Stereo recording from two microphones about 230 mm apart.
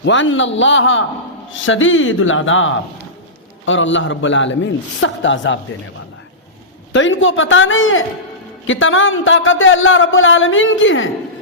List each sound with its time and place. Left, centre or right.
0.0 s a man's voice: left
6.9 s a man's voice: left